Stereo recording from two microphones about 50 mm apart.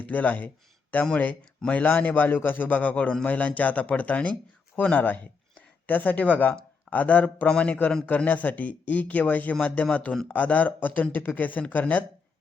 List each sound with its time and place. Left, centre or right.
0.0 s a man's voice: left